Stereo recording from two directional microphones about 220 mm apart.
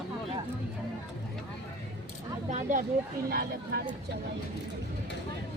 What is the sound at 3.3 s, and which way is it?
Speech, 45° right (ahead or behind).